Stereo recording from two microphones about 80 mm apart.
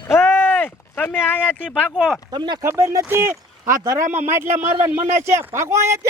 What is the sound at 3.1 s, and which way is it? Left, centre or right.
Speech, right.